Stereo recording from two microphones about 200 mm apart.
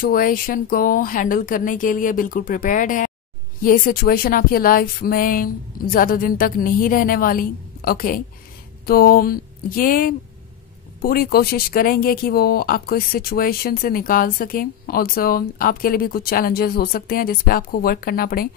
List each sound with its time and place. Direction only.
0.0 s speech: 45° left (ahead or behind)